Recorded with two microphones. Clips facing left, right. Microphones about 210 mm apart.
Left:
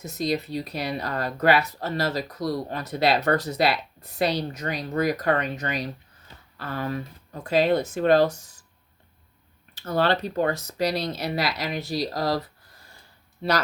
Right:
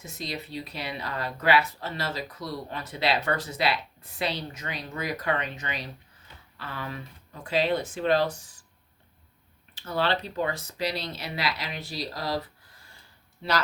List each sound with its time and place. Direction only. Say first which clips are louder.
0.0 s speech: left 10 dB; 40° left (ahead or behind)
9.7 s speech: left 4 dB; 45° left (ahead or behind)
13.4 s speech: left 4 dB; 45° left (ahead or behind)